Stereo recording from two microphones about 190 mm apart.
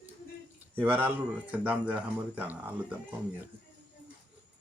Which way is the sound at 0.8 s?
10° right (ahead or behind).